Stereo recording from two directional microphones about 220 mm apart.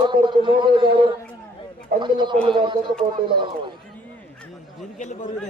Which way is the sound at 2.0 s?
20° right (ahead or behind).